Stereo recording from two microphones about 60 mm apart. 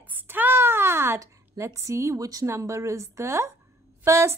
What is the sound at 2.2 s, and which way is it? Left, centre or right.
Speech, right.